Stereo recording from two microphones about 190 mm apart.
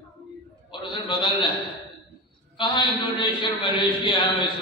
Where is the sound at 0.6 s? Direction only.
25° left (ahead or behind).